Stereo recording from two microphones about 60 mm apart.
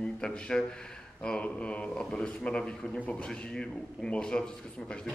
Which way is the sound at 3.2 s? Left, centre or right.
Centre.